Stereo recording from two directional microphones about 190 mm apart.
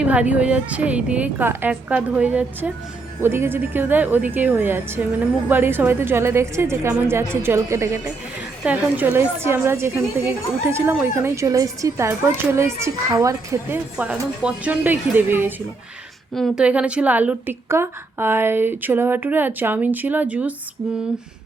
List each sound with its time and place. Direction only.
0.0 s a woman's voice: 5° right (ahead or behind)